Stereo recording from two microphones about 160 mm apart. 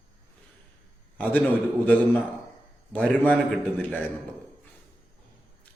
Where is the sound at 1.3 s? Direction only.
10° left (ahead or behind).